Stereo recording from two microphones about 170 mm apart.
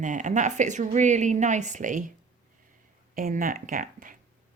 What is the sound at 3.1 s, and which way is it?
Speech, 55° right (ahead or behind).